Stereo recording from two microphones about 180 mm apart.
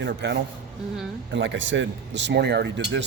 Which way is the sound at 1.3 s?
90° right.